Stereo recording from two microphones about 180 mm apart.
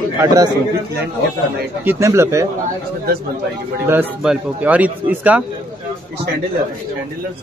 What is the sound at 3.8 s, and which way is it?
Speech, 10° right (ahead or behind).